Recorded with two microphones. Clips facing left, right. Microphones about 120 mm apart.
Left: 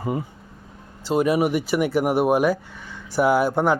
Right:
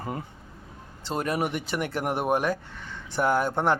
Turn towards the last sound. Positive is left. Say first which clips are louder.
# left 5 dB
turn(degrees=5)  # may be behind; listen again after turning